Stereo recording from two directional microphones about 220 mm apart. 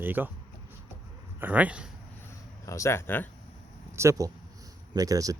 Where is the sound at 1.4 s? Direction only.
5° right (ahead or behind).